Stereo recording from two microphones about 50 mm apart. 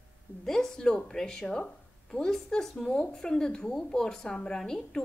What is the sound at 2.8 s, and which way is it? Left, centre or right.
A woman's voice, centre.